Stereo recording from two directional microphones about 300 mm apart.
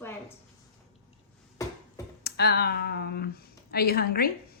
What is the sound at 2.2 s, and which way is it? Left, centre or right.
Speech, left.